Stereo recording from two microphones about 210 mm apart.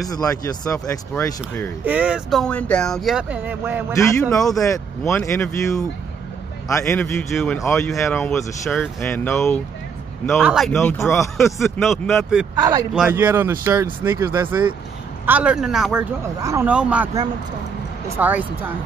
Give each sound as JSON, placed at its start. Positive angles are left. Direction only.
{"t": 0.1, "sound": "speech", "side_deg": 15}
{"t": 1.9, "sound": "speech", "side_deg": -5}
{"t": 4.6, "sound": "speech", "side_deg": 15}
{"t": 7.2, "sound": "speech", "side_deg": 5}
{"t": 10.2, "sound": "speech", "side_deg": 0}
{"t": 10.7, "sound": "speech", "side_deg": 10}
{"t": 11.3, "sound": "speech", "side_deg": 0}
{"t": 12.5, "sound": "speech", "side_deg": -20}
{"t": 16.3, "sound": "speech", "side_deg": -15}